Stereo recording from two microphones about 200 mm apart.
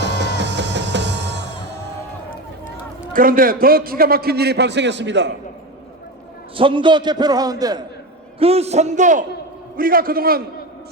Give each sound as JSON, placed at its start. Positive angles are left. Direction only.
{"t": 0.0, "sound": "music", "side_deg": -60}
{"t": 3.1, "sound": "a man's voice", "side_deg": -45}
{"t": 6.6, "sound": "a man's voice", "side_deg": -25}
{"t": 8.4, "sound": "a man's voice", "side_deg": -30}